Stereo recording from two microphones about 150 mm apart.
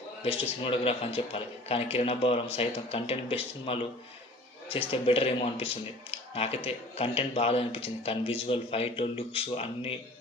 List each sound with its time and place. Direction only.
0.2 s speech: 40° left (ahead or behind)